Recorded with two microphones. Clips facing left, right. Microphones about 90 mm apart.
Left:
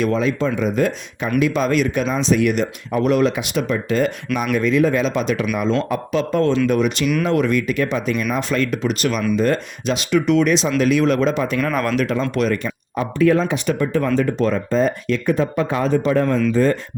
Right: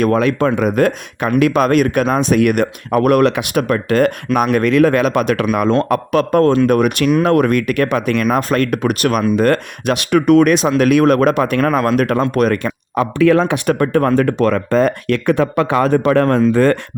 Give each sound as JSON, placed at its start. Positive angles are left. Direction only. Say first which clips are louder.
{"t": 0.0, "sound": "speech", "louder": "right 5 dB", "side_deg": -60}
{"t": 11.6, "sound": "speech", "louder": "right 7 dB", "side_deg": -35}
{"t": 11.9, "sound": "speech", "louder": "right 5 dB", "side_deg": -55}